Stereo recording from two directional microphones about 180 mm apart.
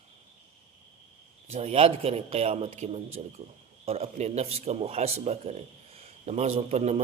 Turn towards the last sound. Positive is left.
turn(degrees=-35)  # may be behind; listen again after turning